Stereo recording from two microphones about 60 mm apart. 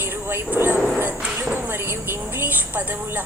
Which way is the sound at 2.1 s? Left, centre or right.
Right.